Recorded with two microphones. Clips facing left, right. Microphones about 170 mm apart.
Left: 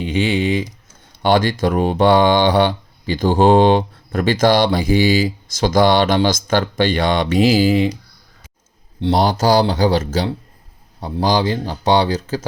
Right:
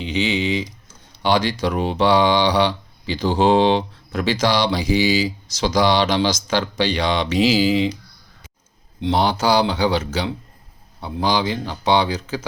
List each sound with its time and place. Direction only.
0.0 s typing: 50° left (ahead or behind)
1.2 s speech: 50° left (ahead or behind)
9.0 s speech: 35° left (ahead or behind)